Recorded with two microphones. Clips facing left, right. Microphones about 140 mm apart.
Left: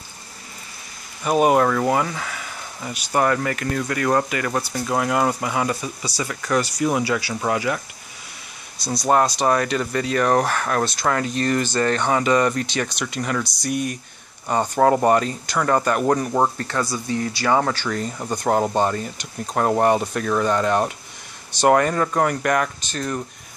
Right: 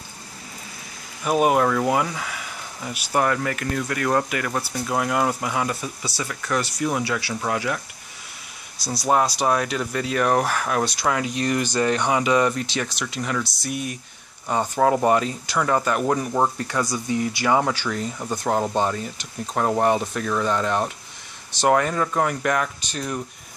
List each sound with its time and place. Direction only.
1.2 s speech: centre (ahead or behind)
16.5 s speech: 10° right (ahead or behind)
17.6 s speech: 5° right (ahead or behind)